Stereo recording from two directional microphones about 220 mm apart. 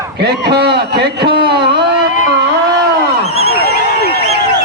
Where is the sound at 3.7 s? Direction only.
45° right (ahead or behind).